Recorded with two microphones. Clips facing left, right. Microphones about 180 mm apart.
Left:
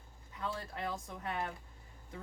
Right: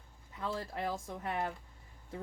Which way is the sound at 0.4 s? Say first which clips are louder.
Right 3 dB; 30° right (ahead or behind).